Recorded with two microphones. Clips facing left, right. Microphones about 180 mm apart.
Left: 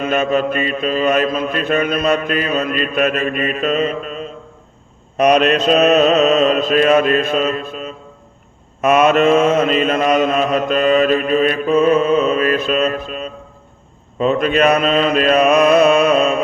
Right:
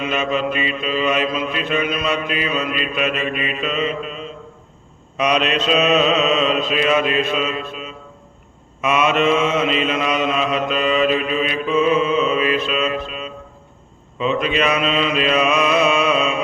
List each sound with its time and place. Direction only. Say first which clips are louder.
0.0 s mantra: left 4 dB; 45° left (ahead or behind)